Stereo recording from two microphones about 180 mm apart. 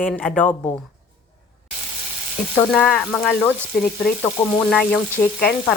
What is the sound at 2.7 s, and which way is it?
Speech, 5° left (ahead or behind).